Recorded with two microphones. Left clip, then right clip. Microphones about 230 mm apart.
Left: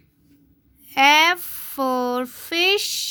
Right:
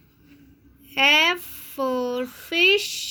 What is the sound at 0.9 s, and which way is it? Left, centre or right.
Speech, left.